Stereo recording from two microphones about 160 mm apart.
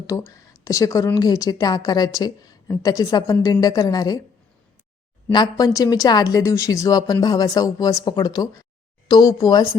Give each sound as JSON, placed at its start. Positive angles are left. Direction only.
{"t": 0.1, "sound": "a woman's voice", "side_deg": 20}
{"t": 5.3, "sound": "a woman's voice", "side_deg": 25}